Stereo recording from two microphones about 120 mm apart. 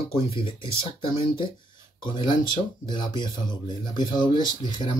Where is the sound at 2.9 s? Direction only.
40° left (ahead or behind).